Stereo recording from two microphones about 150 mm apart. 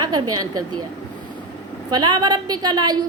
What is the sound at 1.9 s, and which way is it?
A woman's voice, 25° right (ahead or behind).